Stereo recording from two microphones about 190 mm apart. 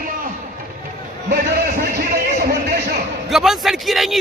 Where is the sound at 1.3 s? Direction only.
55° right (ahead or behind).